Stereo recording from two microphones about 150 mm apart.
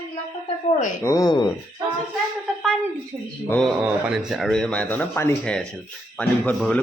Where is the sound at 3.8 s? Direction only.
5° right (ahead or behind).